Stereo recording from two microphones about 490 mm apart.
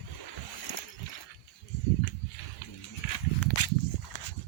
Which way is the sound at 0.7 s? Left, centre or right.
Left.